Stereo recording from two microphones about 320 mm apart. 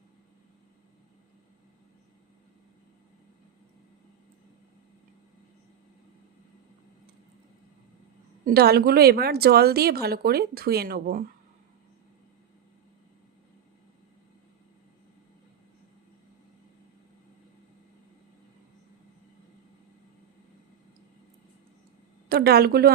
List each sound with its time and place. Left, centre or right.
8.4 s a woman's voice: right
22.3 s speech: right